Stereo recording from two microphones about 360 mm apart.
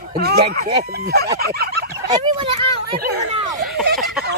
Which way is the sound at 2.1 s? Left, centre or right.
Centre.